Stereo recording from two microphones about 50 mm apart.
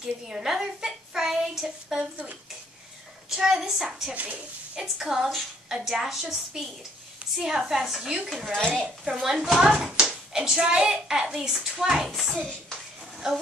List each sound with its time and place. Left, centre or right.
0.0 s a child's voice: centre
3.3 s a woman's voice: centre
4.1 s speech: right
4.9 s a woman's voice: centre
8.5 s a woman's voice: centre
9.1 s speech: centre
9.9 s a sound: centre
10.6 s a woman's voice: centre
12.1 s speech: centre
13.2 s a woman's voice: centre